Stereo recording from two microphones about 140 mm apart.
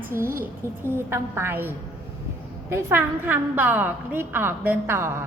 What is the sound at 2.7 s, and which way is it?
A woman's voice, 15° right (ahead or behind).